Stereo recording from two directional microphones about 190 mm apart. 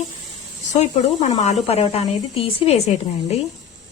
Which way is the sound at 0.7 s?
35° left (ahead or behind).